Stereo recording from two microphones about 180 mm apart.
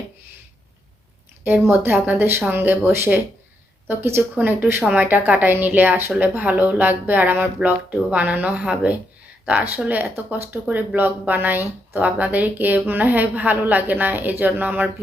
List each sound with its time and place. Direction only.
1.5 s a woman's voice: 10° right (ahead or behind)